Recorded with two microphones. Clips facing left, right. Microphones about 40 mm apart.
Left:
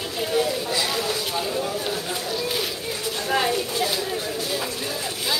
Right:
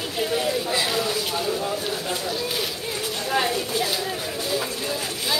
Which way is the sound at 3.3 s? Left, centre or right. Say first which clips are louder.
Left 1 dB; centre.